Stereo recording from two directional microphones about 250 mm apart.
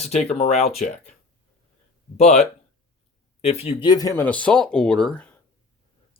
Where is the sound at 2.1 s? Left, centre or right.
Left; by 5.4 s centre.